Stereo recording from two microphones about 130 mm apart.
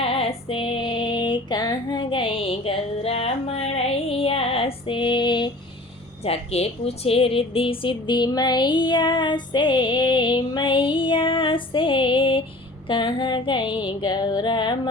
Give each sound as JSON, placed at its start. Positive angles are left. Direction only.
{"t": 0.0, "sound": "music", "side_deg": 50}
{"t": 6.2, "sound": "speech", "side_deg": 50}